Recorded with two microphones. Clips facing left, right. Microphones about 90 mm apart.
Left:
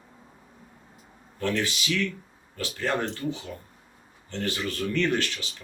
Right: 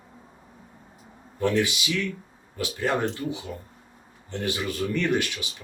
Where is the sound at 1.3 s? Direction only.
15° right (ahead or behind).